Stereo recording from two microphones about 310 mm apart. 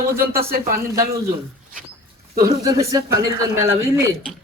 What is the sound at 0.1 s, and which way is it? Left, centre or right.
Speech, right.